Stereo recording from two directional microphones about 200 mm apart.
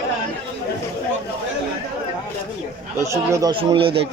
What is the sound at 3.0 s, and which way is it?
Speech, 15° right (ahead or behind).